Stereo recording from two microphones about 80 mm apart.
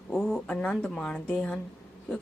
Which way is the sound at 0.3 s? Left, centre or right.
Centre.